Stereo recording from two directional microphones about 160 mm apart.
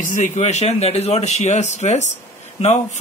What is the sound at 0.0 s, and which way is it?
Speech, 50° left (ahead or behind).